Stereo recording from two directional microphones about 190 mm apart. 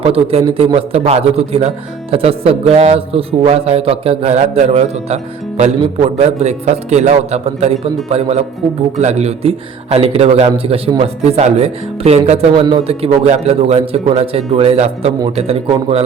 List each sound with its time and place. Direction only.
0.0 s a man's voice: 30° right (ahead or behind)